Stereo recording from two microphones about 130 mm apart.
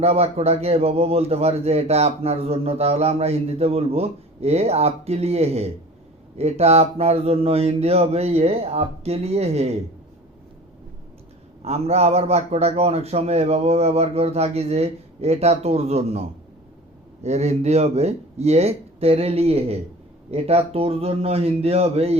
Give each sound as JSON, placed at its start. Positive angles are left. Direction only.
{"t": 0.0, "sound": "a man's voice", "side_deg": -50}
{"t": 11.6, "sound": "a man's voice", "side_deg": -55}
{"t": 17.2, "sound": "a man's voice", "side_deg": -60}